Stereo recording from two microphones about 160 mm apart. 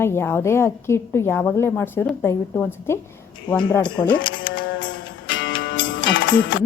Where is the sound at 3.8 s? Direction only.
30° left (ahead or behind).